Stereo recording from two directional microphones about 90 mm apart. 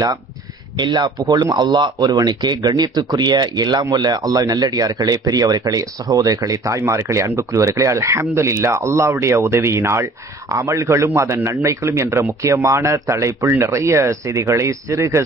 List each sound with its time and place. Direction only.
0.7 s speech: 55° right (ahead or behind); by 15.2 s 30° right (ahead or behind)